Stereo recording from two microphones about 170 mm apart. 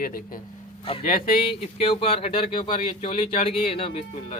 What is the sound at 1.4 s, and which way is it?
Speech, 35° left (ahead or behind).